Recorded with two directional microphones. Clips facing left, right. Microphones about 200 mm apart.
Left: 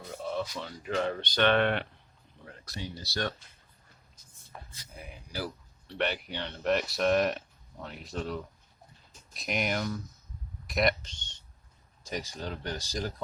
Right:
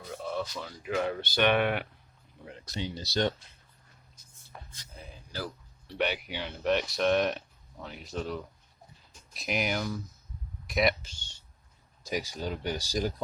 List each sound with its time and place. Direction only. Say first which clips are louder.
0.1 s speech: even; centre (ahead or behind)
2.4 s speech: right 4 dB; 20° right (ahead or behind)
4.9 s a sound: left 1 dB; 15° left (ahead or behind)
5.9 s speech: right 1 dB; 5° right (ahead or behind)
10.7 s a sound: right 1 dB; centre (ahead or behind)
12.0 s speech: right 3 dB; 10° right (ahead or behind)